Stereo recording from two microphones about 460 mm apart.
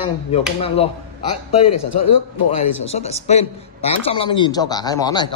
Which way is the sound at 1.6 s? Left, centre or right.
Left.